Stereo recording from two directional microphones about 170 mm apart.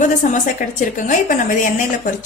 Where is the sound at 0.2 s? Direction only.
50° left (ahead or behind).